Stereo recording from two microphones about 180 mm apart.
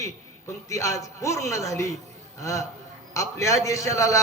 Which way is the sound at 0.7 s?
15° left (ahead or behind).